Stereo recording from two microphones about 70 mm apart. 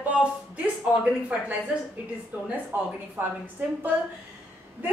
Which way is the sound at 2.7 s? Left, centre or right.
Right.